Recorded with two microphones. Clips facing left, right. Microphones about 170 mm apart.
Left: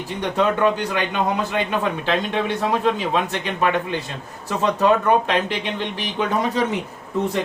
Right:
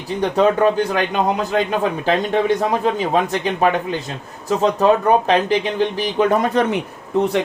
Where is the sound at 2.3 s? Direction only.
45° right (ahead or behind).